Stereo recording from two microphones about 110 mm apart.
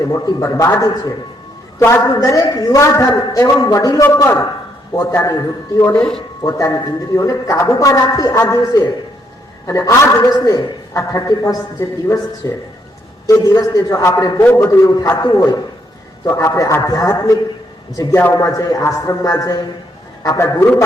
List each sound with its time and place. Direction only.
0.0 s a man's voice: 30° left (ahead or behind)
2.2 s a man's voice: 30° left (ahead or behind)